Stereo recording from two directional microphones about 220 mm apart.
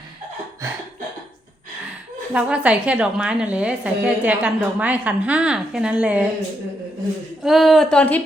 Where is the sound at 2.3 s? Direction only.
5° right (ahead or behind).